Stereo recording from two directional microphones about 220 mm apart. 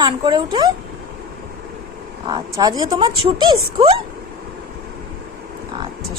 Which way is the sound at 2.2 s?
20° right (ahead or behind).